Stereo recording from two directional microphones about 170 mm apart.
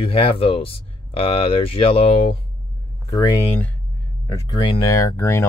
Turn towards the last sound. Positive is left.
turn(degrees=15)  # may be behind; listen again after turning